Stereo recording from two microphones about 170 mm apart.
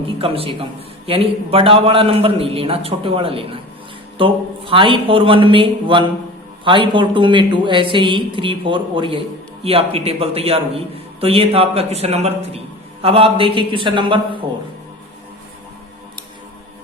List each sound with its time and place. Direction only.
0.2 s a man's voice: 35° right (ahead or behind)